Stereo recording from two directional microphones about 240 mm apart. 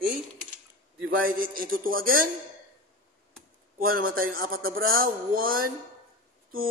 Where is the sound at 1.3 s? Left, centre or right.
Right.